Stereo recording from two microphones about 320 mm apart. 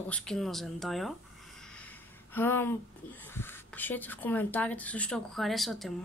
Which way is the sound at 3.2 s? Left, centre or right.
Centre.